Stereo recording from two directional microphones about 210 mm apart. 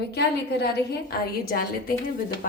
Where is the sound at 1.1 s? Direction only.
45° left (ahead or behind).